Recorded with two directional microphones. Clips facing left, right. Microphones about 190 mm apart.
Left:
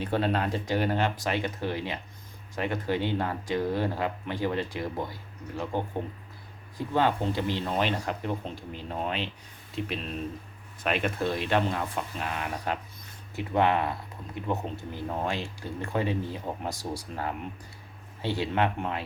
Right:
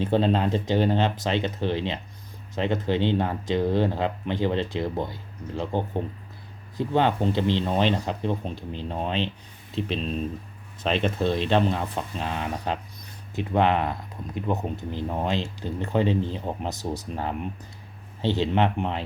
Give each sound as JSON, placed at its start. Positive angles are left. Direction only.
{"t": 0.0, "sound": "speech", "side_deg": -25}
{"t": 18.2, "sound": "speech", "side_deg": -25}